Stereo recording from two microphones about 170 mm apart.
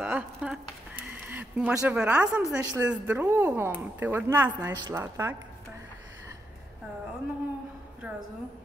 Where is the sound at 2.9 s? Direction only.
10° right (ahead or behind).